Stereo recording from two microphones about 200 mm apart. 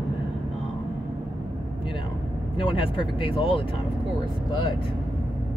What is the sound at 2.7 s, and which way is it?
Speech, 25° left (ahead or behind).